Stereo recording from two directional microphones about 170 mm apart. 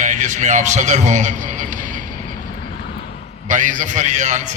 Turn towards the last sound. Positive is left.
turn(degrees=-45)  # may be behind; listen again after turning